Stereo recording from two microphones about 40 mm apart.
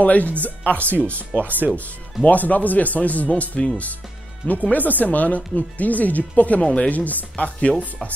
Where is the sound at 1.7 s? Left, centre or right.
Left.